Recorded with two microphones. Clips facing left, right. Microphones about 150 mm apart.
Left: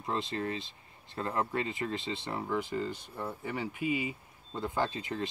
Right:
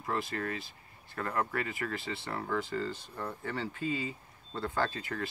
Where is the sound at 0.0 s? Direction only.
20° left (ahead or behind).